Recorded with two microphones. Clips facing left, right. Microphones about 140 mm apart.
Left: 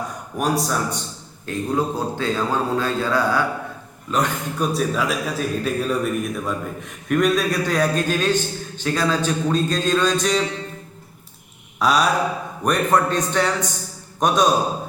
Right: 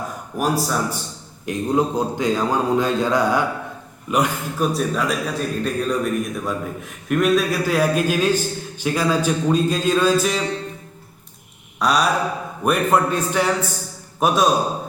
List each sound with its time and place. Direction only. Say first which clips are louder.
0.3 s a man's voice: right 1 dB; centre (ahead or behind)
1.5 s a man's voice: right 2 dB; 20° right (ahead or behind)
4.1 s a man's voice: right 2 dB; 5° right (ahead or behind)
11.8 s a man's voice: even; centre (ahead or behind)